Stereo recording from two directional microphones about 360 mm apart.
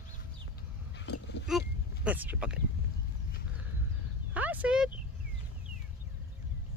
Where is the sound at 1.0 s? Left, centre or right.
Left.